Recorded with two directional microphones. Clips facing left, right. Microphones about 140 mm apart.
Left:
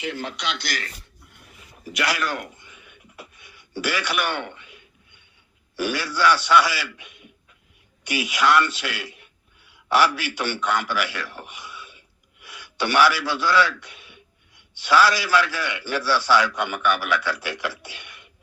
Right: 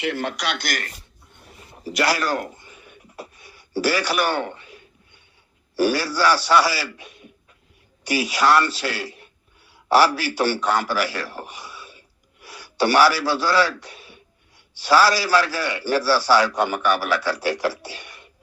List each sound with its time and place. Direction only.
0.0 s speech: 65° right (ahead or behind)
1.5 s a sound: 35° right (ahead or behind)
5.7 s a man's voice: 35° right (ahead or behind)